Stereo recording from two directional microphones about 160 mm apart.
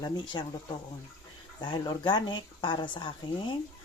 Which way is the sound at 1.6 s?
25° left (ahead or behind).